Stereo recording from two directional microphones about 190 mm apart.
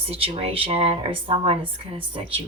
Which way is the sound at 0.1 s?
30° right (ahead or behind).